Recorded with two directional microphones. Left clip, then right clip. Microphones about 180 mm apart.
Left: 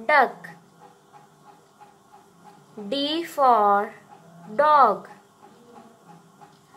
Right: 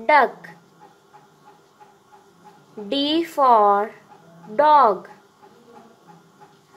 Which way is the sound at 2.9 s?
25° right (ahead or behind).